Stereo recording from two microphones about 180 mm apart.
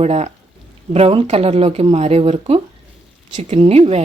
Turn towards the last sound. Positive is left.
turn(degrees=-35)  # may be behind; listen again after turning